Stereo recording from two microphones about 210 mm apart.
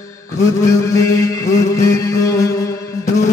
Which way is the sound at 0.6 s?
15° left (ahead or behind).